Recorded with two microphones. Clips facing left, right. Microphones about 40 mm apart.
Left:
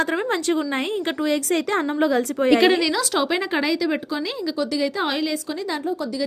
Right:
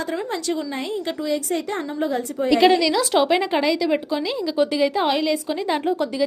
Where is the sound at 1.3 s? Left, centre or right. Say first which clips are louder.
Left 2 dB; left.